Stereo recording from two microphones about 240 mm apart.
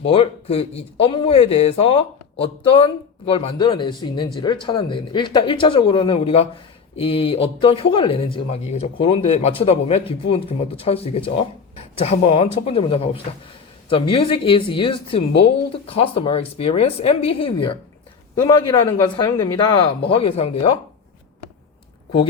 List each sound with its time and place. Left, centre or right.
0.0 s speech: left
14.1 s speech: left